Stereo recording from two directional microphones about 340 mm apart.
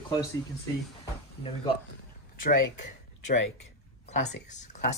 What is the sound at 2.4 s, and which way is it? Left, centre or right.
Speech, left.